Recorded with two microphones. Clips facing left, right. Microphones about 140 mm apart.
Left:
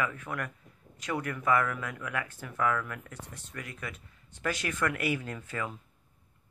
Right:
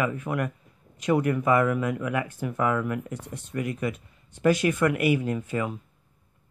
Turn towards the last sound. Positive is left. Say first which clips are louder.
# right 9 dB
turn(degrees=-20)  # may be behind; listen again after turning